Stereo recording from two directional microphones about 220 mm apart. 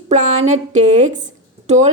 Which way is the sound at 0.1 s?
30° right (ahead or behind).